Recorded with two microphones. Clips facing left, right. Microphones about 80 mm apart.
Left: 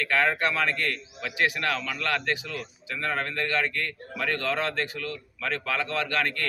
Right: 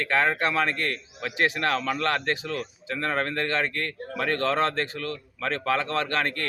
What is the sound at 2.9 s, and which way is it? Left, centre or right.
A man's voice, right.